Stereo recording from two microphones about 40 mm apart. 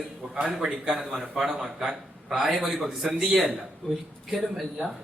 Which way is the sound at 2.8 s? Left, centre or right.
Right.